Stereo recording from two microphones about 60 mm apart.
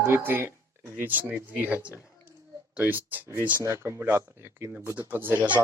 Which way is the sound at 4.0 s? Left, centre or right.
Right.